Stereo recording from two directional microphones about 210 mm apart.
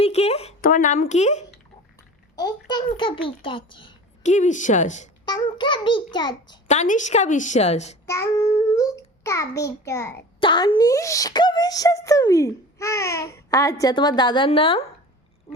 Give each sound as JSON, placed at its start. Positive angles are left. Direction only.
{"t": 0.0, "sound": "a sound", "side_deg": 30}
{"t": 2.3, "sound": "a child's voice", "side_deg": 20}
{"t": 4.2, "sound": "a woman's voice", "side_deg": 35}
{"t": 5.2, "sound": "a child's voice", "side_deg": 20}
{"t": 6.7, "sound": "a woman's voice", "side_deg": 35}
{"t": 8.0, "sound": "a child's voice", "side_deg": 15}
{"t": 10.4, "sound": "speech", "side_deg": 25}